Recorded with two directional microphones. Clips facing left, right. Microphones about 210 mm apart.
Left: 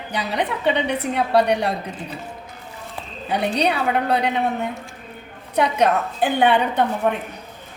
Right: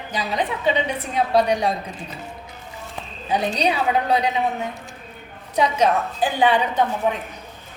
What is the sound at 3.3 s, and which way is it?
A woman's voice, 65° left (ahead or behind).